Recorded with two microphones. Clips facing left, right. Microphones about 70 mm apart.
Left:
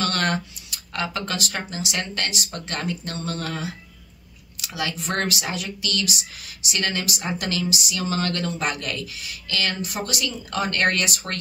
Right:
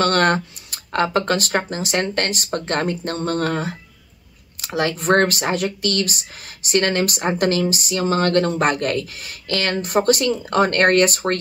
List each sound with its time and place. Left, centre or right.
0.0 s speech: right